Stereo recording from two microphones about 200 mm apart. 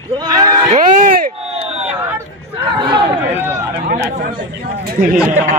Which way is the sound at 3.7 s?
50° right (ahead or behind).